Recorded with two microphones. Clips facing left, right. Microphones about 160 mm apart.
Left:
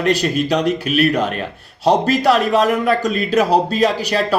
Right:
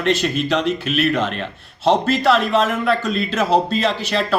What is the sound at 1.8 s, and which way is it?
Speech, 40° left (ahead or behind).